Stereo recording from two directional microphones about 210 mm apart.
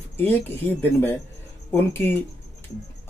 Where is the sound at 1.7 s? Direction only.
10° left (ahead or behind).